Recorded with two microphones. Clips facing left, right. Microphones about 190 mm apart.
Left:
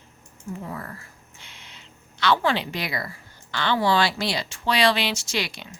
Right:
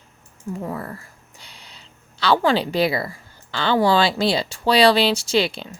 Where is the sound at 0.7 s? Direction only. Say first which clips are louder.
Right 5 dB; 35° right (ahead or behind).